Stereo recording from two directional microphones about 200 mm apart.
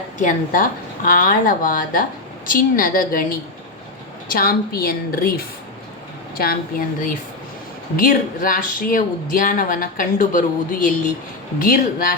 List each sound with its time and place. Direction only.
0.2 s speech: 40° left (ahead or behind)